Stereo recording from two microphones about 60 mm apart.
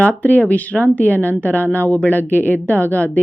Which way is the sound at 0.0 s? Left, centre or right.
Left.